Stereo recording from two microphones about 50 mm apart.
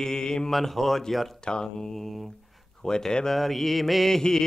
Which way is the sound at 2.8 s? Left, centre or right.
Centre.